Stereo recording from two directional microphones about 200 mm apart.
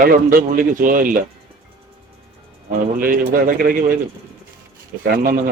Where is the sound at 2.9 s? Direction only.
45° right (ahead or behind).